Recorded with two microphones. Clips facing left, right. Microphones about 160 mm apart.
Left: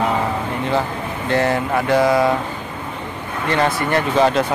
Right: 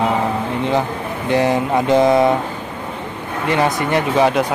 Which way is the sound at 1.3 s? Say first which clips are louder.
Right 2 dB; 15° right (ahead or behind).